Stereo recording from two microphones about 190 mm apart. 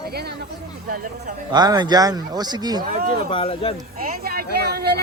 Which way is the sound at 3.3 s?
30° left (ahead or behind).